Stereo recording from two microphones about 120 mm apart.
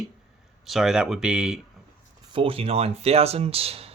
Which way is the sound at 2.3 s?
50° right (ahead or behind).